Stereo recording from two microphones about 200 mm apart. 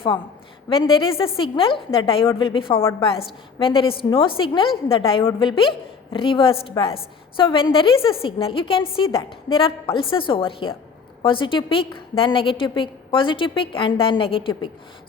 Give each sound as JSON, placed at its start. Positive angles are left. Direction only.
{"t": 0.7, "sound": "a woman's voice", "side_deg": 25}